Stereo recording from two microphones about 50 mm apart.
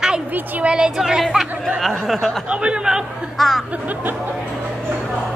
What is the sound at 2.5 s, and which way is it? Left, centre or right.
Speech, right.